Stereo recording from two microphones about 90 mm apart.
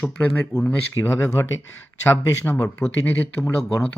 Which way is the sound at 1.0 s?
30° left (ahead or behind).